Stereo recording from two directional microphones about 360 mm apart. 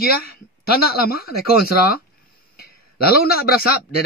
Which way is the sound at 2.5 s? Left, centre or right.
Left.